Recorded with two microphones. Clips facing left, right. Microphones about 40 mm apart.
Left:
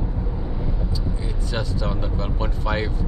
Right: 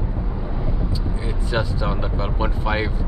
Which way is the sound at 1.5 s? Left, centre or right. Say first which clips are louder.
Right 4 dB; centre.